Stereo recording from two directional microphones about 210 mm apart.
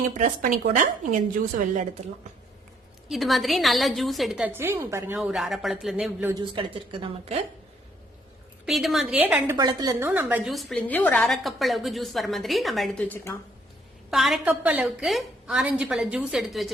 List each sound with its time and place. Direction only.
0.1 s speech: 40° right (ahead or behind)
3.1 s a woman's voice: centre (ahead or behind)
6.3 s a woman's voice: 25° right (ahead or behind)
8.6 s a woman's voice: centre (ahead or behind)
14.1 s a woman's voice: centre (ahead or behind)